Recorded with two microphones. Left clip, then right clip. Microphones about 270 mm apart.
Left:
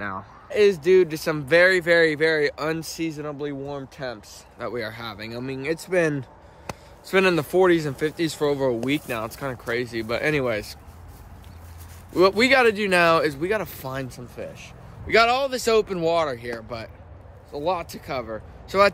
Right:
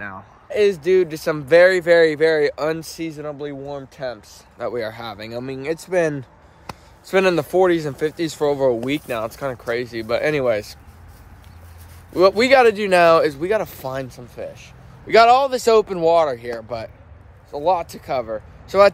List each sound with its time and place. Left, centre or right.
0.5 s speech: centre
12.1 s speech: centre
15.0 s speech: centre